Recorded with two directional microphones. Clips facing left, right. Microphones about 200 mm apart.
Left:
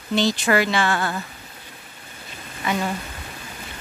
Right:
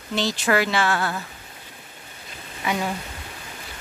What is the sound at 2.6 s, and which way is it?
Speech, 5° right (ahead or behind).